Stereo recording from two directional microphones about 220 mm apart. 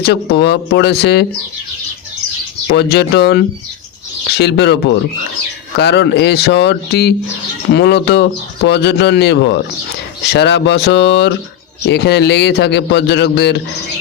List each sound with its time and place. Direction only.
0.0 s a man's voice: 50° left (ahead or behind)
2.7 s a man's voice: 50° left (ahead or behind)